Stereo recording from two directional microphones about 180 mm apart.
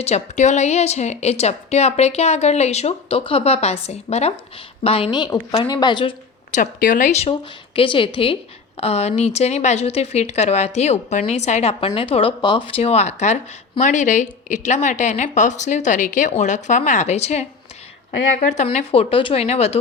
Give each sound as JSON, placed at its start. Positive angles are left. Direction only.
{"t": 0.0, "sound": "a woman's voice", "side_deg": 40}
{"t": 6.5, "sound": "a woman's voice", "side_deg": 50}
{"t": 18.5, "sound": "speech", "side_deg": 40}